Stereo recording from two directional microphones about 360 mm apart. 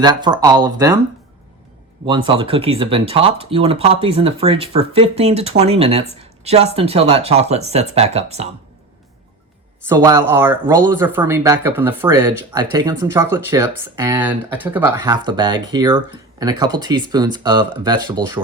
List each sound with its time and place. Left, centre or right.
0.0 s speech: centre
2.0 s speech: centre
9.9 s speech: centre